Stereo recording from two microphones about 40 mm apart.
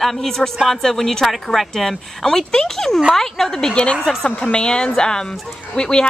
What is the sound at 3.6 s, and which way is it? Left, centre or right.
A woman's voice, left.